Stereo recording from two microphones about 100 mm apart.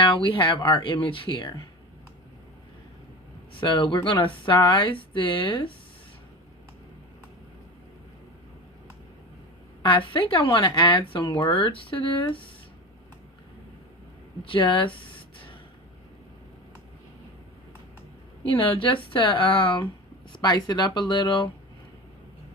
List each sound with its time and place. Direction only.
0.0 s speech: 60° left (ahead or behind)
3.5 s speech: 55° left (ahead or behind)
9.8 s speech: 55° left (ahead or behind)
14.4 s speech: 60° left (ahead or behind)
18.4 s speech: 60° left (ahead or behind)
20.3 s speech: 45° left (ahead or behind)